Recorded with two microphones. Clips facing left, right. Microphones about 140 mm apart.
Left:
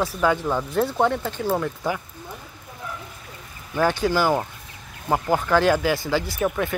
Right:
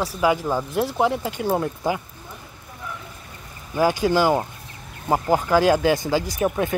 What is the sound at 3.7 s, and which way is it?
Speech, 10° right (ahead or behind).